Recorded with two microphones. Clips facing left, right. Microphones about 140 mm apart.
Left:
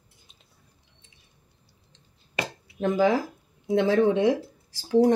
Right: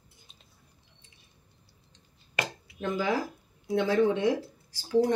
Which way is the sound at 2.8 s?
90° left.